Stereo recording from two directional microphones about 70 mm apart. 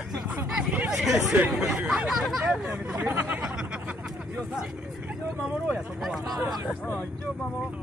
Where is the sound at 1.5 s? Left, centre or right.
Centre.